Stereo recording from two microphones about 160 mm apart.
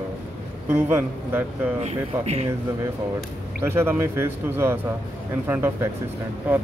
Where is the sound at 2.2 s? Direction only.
40° right (ahead or behind).